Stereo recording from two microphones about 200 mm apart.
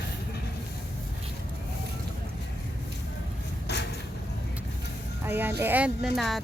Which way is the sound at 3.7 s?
55° left (ahead or behind).